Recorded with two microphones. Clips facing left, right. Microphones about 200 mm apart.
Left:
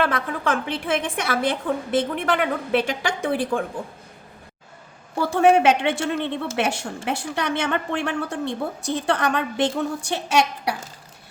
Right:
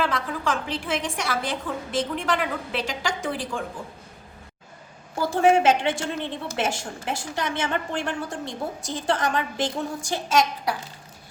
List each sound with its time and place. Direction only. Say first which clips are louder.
0.0 s a woman's voice: left 3 dB; 60° left (ahead or behind)
5.3 s a woman's voice: left 2 dB; 65° left (ahead or behind)